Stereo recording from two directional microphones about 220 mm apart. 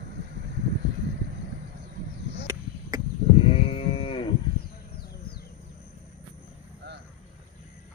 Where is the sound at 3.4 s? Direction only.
25° left (ahead or behind).